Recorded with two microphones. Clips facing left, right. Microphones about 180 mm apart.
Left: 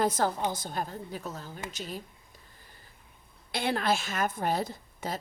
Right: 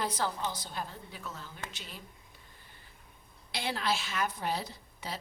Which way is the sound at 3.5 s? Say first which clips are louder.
Left 5 dB; 55° left (ahead or behind).